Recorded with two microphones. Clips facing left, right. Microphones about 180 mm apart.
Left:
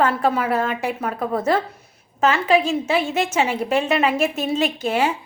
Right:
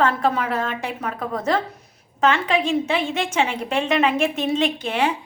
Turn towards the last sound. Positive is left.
turn(degrees=5)  # may be behind; listen again after turning